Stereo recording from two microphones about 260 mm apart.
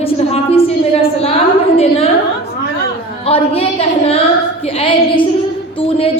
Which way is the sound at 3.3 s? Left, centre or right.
Left.